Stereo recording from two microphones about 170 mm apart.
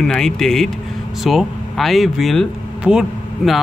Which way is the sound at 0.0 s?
5° left (ahead or behind).